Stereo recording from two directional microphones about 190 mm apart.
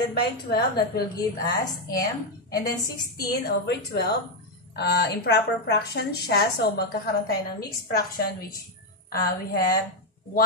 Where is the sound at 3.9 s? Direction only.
55° left (ahead or behind).